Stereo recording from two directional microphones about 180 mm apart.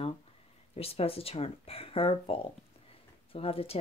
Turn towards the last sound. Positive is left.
turn(degrees=35)  # may be behind; listen again after turning